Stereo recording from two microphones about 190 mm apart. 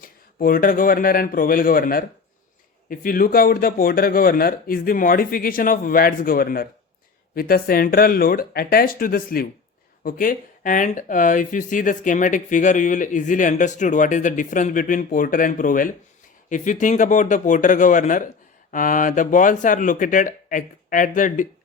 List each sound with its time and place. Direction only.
0.0 s speech: 50° left (ahead or behind)